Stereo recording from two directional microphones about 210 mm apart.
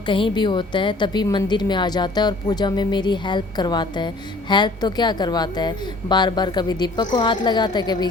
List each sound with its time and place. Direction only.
0.1 s a woman's voice: 25° left (ahead or behind)